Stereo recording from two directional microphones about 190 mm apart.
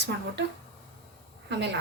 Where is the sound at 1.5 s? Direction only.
65° right (ahead or behind).